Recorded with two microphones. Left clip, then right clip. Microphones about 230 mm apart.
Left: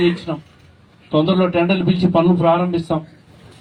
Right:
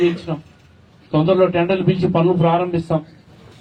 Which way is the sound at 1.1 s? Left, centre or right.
Left.